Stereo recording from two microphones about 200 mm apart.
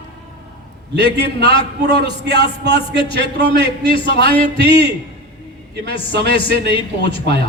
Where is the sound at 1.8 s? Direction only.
60° right (ahead or behind).